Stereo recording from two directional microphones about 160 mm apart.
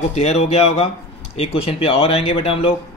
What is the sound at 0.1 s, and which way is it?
Speech, 40° left (ahead or behind).